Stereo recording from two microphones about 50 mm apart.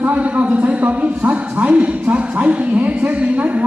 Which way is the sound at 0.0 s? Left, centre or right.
Right.